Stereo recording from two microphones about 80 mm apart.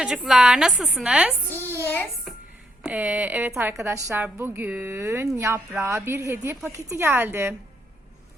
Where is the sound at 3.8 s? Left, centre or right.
Right.